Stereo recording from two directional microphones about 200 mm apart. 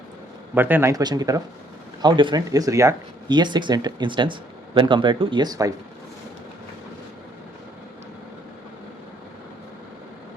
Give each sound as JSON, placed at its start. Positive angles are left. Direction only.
{"t": 0.5, "sound": "speech", "side_deg": -10}